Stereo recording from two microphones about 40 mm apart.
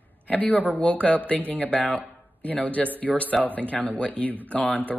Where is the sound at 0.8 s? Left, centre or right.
Left.